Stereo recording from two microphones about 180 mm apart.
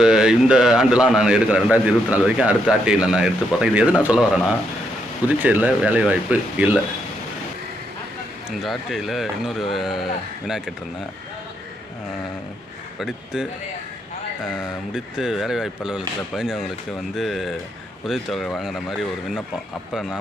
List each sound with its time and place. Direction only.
0.0 s a man's voice: 5° right (ahead or behind)
5.4 s speech: 10° right (ahead or behind)
8.4 s a man's voice: centre (ahead or behind)
13.0 s a man's voice: 5° right (ahead or behind)
14.5 s a man's voice: 5° right (ahead or behind)